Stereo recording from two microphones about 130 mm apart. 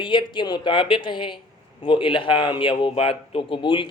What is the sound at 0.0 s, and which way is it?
Speech, 40° left (ahead or behind).